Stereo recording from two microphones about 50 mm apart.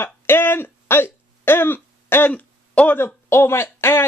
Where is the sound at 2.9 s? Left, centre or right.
Left.